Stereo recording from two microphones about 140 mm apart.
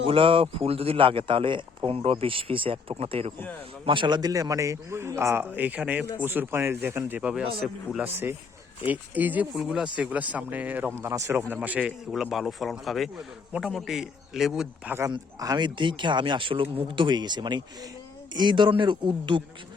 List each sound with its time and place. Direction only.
0.0 s a man's voice: 40° right (ahead or behind); by 14.9 s 5° right (ahead or behind)
15.1 s speech: 30° right (ahead or behind)